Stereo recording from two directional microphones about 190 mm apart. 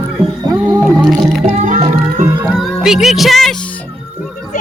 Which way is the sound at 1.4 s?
35° right (ahead or behind).